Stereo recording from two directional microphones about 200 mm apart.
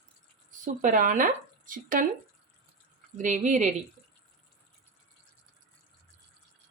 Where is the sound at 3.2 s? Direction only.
40° right (ahead or behind).